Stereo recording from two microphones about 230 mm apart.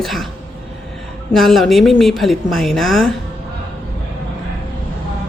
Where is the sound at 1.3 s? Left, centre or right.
Centre.